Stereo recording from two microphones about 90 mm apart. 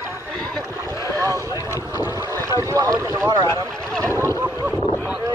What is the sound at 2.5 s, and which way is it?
Boat, 40° right (ahead or behind).